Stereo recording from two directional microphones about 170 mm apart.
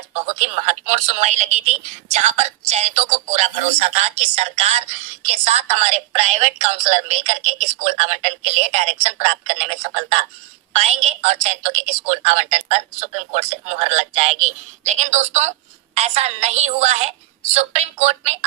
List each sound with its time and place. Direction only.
0.1 s speech: 40° right (ahead or behind)